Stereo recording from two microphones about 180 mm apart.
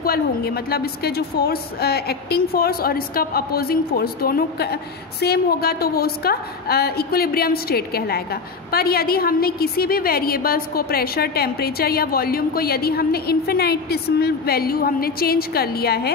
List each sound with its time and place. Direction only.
0.0 s a woman's voice: 60° left (ahead or behind)